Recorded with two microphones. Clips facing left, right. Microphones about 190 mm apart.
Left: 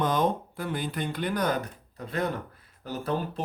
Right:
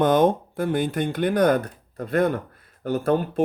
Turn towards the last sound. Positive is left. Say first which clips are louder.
# right 9 dB
turn(degrees=-55)  # may be behind; listen again after turning